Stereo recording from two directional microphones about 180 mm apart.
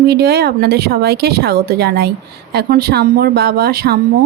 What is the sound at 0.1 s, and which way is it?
A woman's voice, 65° right (ahead or behind).